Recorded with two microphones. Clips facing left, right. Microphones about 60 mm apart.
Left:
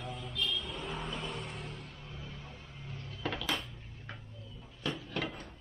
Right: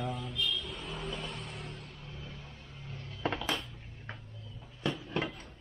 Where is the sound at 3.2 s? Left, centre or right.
Right.